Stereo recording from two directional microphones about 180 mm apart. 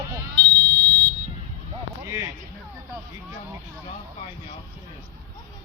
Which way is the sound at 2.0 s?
15° right (ahead or behind).